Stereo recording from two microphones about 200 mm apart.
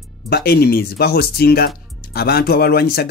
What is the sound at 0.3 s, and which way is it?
Speech, 50° left (ahead or behind).